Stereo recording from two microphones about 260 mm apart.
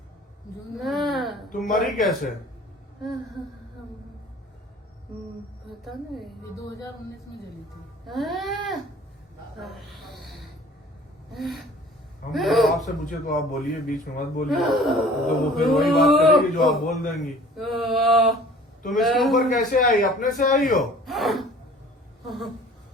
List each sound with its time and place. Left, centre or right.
0.8 s a sound: centre
1.5 s speech: centre
5.8 s speech: centre
8.0 s speech: centre
9.6 s music: centre
11.3 s speech: centre
12.8 s a man's voice: left
14.4 s speech: centre
19.5 s speech: left
21.0 s speech: centre